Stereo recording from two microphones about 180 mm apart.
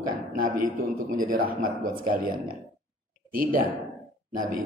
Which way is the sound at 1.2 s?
50° right (ahead or behind).